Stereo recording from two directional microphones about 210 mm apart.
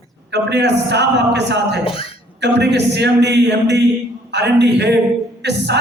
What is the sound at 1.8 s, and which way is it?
Speech, 25° left (ahead or behind).